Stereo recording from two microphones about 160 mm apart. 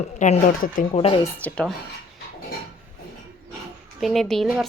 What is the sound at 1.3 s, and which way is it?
Speech, 10° left (ahead or behind).